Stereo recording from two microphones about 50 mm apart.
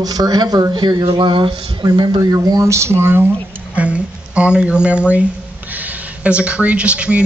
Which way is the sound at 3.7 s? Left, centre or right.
Right.